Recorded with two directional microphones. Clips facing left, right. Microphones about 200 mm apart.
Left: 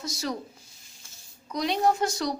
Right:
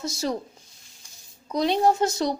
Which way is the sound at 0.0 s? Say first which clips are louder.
Right 4 dB; 25° right (ahead or behind).